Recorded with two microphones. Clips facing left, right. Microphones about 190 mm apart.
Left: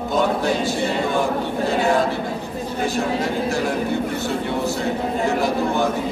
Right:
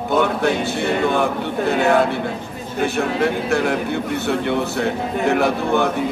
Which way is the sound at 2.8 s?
60° right (ahead or behind).